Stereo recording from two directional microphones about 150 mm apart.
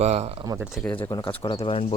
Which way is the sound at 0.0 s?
45° right (ahead or behind).